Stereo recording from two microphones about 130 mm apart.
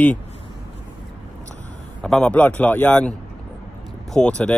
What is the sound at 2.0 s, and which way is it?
Speech, 5° left (ahead or behind).